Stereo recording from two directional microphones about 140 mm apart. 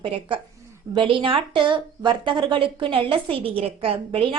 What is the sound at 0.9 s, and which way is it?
A woman's voice, 40° right (ahead or behind).